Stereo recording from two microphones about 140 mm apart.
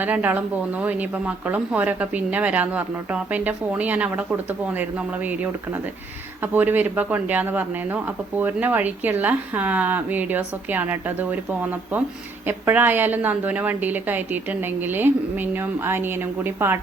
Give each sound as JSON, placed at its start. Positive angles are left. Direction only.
{"t": 0.0, "sound": "speech", "side_deg": -10}
{"t": 6.4, "sound": "speech", "side_deg": -15}